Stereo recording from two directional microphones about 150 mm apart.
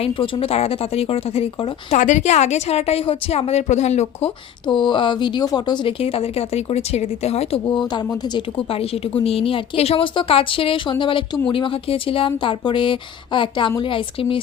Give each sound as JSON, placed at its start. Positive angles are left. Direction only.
{"t": 0.0, "sound": "a woman's voice", "side_deg": 40}
{"t": 1.9, "sound": "a woman's voice", "side_deg": 55}
{"t": 4.6, "sound": "a woman's voice", "side_deg": 30}